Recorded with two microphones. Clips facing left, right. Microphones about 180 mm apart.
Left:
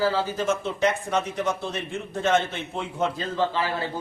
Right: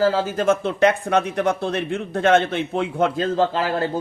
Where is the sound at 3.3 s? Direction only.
45° right (ahead or behind).